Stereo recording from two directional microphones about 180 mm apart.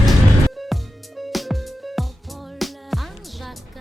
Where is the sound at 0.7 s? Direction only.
Centre (ahead or behind).